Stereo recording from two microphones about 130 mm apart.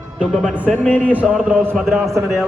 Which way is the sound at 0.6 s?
10° left (ahead or behind).